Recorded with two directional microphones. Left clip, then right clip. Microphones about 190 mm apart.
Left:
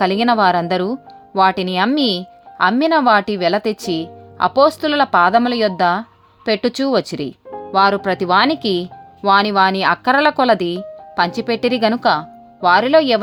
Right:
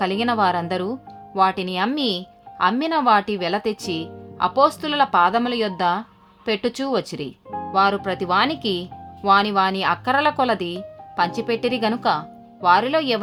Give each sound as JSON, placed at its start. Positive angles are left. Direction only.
{"t": 0.0, "sound": "speech", "side_deg": 35}